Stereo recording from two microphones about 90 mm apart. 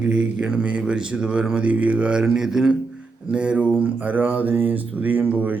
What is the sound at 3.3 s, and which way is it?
Mantra, 15° right (ahead or behind).